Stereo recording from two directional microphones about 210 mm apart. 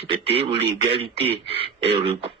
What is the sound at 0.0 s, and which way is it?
Speech, 25° right (ahead or behind).